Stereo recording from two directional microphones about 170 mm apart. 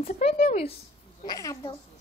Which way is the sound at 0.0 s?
35° left (ahead or behind).